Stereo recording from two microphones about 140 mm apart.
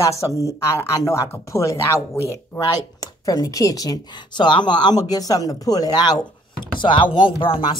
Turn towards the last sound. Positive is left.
turn(degrees=40)  # may be behind; listen again after turning